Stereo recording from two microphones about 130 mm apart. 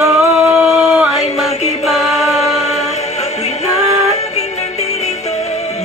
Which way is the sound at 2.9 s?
60° left (ahead or behind).